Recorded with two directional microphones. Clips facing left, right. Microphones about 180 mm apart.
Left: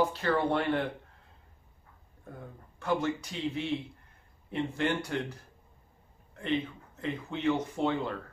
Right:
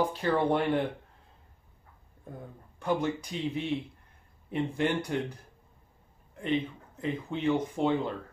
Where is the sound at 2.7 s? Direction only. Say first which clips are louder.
Right 1 dB; 15° right (ahead or behind).